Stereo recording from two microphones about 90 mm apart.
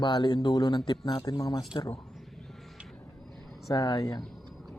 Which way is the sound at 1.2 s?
45° left (ahead or behind).